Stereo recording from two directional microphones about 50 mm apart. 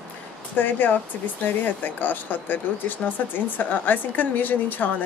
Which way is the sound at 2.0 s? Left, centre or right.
Left.